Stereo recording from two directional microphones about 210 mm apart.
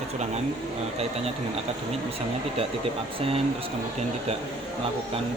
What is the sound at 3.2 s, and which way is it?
Speech, 25° right (ahead or behind).